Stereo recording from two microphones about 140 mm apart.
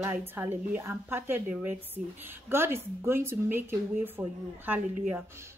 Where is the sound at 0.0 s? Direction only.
15° right (ahead or behind).